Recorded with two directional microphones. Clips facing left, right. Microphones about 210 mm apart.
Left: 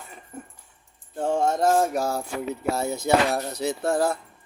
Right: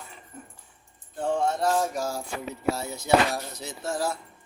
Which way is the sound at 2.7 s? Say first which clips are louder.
Left 2 dB; 50° left (ahead or behind).